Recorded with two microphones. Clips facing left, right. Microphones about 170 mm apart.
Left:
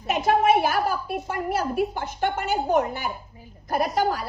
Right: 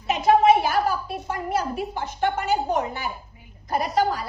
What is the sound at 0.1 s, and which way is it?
A woman's voice, 55° left (ahead or behind).